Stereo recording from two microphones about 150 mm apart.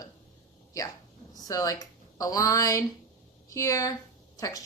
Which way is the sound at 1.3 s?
25° left (ahead or behind).